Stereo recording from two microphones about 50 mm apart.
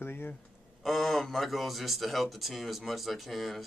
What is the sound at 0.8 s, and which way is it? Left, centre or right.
Speech, centre.